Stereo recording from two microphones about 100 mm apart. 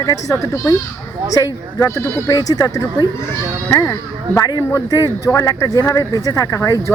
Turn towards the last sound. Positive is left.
turn(degrees=30)  # may be behind; listen again after turning